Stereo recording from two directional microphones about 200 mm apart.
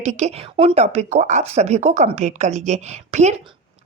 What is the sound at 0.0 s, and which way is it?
A woman's voice, 35° right (ahead or behind).